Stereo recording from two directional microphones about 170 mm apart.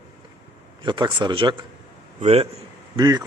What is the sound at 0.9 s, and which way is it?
Speech, 25° right (ahead or behind).